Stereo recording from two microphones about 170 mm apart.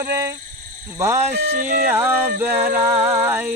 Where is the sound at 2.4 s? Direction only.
15° right (ahead or behind).